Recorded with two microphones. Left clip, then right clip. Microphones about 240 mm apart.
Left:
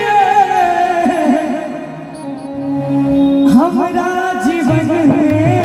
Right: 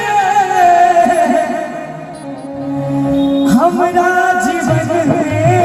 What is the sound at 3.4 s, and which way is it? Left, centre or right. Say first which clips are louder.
Music: right 1 dB; right.